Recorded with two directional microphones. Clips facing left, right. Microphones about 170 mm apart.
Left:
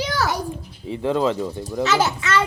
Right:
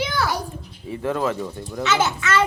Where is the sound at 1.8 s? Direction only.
35° left (ahead or behind).